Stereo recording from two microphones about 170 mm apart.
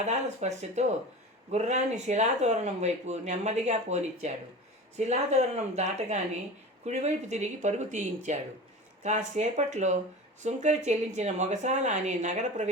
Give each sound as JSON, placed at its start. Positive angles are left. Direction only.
{"t": 0.0, "sound": "speech", "side_deg": -40}